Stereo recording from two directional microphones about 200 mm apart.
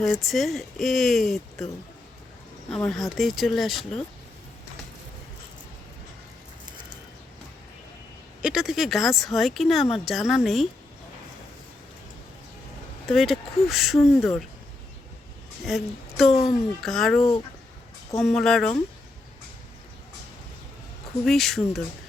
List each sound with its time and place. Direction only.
0.0 s speech: centre (ahead or behind)
2.6 s speech: 5° left (ahead or behind)
8.4 s speech: 5° right (ahead or behind)
13.1 s speech: centre (ahead or behind)
15.6 s speech: centre (ahead or behind)
18.2 s speech: centre (ahead or behind)
21.2 s speech: centre (ahead or behind)